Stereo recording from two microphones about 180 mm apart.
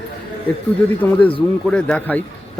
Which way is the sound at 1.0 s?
10° left (ahead or behind).